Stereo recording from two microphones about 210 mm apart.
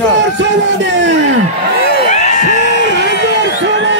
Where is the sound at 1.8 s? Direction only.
45° left (ahead or behind).